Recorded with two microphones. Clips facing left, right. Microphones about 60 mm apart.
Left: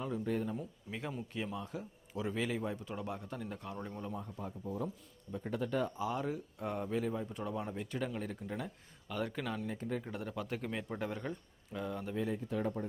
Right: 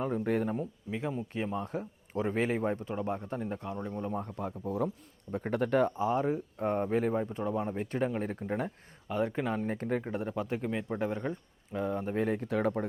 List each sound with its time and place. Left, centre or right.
0.0 s speech: right
0.9 s speech: right
1.3 s speech: right
2.9 s speech: right
3.8 s speech: centre
4.1 s speech: right
6.0 s speech: right
7.3 s speech: right
9.0 s speech: right
9.7 s speech: right
10.0 s speech: right
12.1 s speech: right